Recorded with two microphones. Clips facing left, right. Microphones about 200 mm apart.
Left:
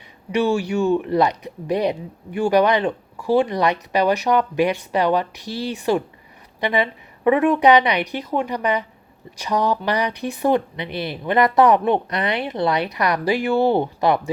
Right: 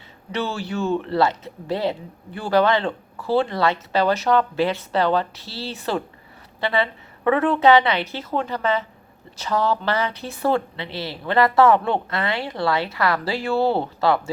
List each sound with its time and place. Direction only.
0.3 s speech: 15° left (ahead or behind)